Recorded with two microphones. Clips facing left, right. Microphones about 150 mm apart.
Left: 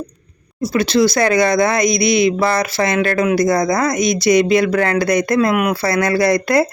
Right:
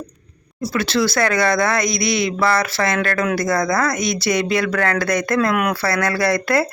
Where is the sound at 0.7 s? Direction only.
15° left (ahead or behind).